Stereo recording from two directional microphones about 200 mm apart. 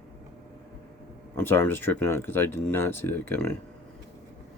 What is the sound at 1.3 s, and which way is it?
Speech, 10° left (ahead or behind).